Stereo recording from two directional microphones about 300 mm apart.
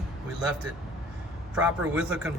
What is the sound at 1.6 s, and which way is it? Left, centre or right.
Speech, centre.